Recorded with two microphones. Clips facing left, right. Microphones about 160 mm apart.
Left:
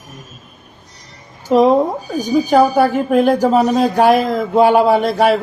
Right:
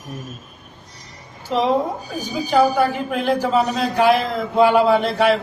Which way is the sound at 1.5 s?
45° left (ahead or behind).